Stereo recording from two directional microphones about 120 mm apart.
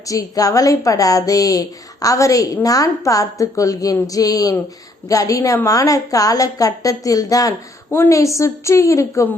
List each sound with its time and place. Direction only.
0.0 s a woman's voice: 30° left (ahead or behind)
7.9 s a woman's voice: 20° left (ahead or behind)